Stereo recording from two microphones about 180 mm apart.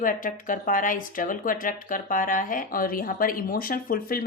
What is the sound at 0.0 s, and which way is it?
Speech, 50° left (ahead or behind).